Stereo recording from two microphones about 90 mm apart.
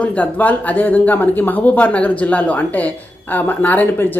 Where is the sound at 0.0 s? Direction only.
15° left (ahead or behind).